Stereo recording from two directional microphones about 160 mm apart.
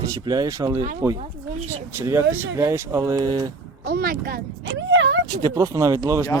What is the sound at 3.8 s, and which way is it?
Speech, 70° right (ahead or behind).